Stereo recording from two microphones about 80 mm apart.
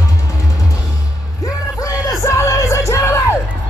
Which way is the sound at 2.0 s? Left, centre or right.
Left.